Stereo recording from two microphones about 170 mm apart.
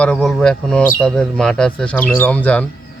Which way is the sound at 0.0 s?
5° left (ahead or behind).